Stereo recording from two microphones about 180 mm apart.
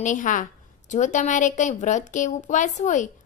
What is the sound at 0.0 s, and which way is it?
A woman's voice, 45° left (ahead or behind).